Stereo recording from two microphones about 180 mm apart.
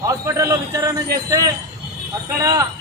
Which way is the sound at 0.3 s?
20° right (ahead or behind).